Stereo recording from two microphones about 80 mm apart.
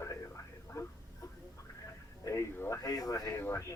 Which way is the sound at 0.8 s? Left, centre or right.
Left.